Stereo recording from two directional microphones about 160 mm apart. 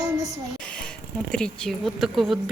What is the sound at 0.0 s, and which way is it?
Music, 20° right (ahead or behind).